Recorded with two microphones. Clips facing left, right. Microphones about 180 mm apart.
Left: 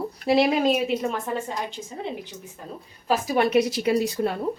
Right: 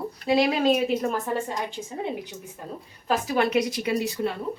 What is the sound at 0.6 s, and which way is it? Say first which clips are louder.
A woman's voice: even; 5° left (ahead or behind).